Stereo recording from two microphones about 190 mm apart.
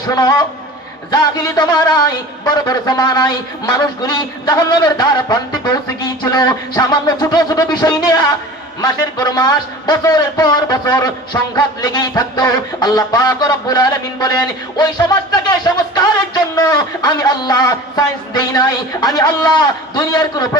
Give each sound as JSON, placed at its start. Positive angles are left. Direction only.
{"t": 0.1, "sound": "a man's voice", "side_deg": 20}